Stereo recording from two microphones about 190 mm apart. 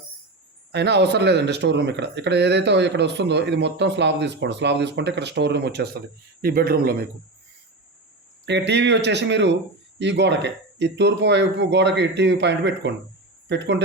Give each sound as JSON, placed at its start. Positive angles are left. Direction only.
{"t": 0.7, "sound": "speech", "side_deg": -60}
{"t": 8.4, "sound": "speech", "side_deg": -65}